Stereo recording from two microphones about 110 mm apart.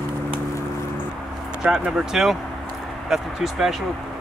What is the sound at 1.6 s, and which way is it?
Speech, 5° right (ahead or behind).